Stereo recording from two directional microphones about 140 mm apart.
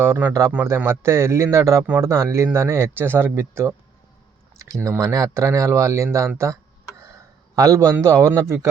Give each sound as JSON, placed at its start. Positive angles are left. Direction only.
{"t": 0.0, "sound": "a man's voice", "side_deg": -15}
{"t": 4.8, "sound": "a man's voice", "side_deg": -20}